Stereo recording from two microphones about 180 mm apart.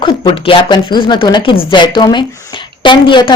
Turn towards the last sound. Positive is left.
turn(degrees=25)  # may be behind; listen again after turning